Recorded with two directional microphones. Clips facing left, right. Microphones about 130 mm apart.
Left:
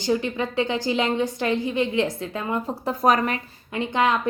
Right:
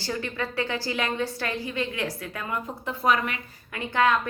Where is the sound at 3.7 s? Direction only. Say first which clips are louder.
Left 1 dB; 20° left (ahead or behind).